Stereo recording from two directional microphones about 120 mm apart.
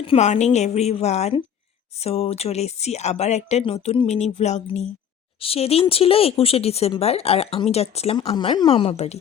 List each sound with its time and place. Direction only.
0.2 s speech: 75° left (ahead or behind)
3.6 s speech: 50° left (ahead or behind); by 4.9 s 75° left (ahead or behind)
5.4 s speech: 55° left (ahead or behind)
8.4 s speech: 45° left (ahead or behind); by 9.1 s 60° left (ahead or behind)